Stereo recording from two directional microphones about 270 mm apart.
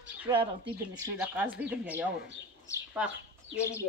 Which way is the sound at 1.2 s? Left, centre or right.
Centre.